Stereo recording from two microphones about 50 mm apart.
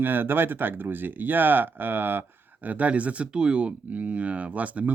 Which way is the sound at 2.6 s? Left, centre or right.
Right.